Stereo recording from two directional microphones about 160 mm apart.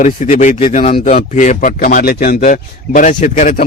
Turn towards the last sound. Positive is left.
turn(degrees=55)  # may be behind; listen again after turning